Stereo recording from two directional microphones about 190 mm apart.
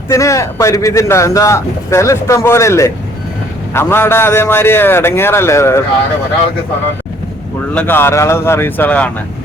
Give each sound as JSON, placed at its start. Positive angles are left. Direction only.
{"t": 0.1, "sound": "speech", "side_deg": 15}
{"t": 7.7, "sound": "speech", "side_deg": 10}